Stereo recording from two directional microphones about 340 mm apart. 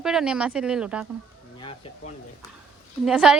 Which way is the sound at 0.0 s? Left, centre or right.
Centre.